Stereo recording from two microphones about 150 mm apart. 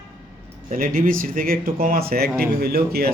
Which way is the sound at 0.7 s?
70° right (ahead or behind).